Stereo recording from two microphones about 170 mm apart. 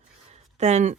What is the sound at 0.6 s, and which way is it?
Speech, 40° right (ahead or behind).